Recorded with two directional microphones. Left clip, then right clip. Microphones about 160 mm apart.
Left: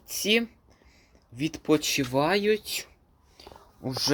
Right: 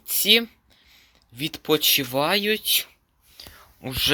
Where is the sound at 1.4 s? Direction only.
Centre (ahead or behind).